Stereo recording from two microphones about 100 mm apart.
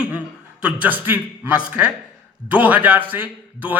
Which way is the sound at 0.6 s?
15° right (ahead or behind).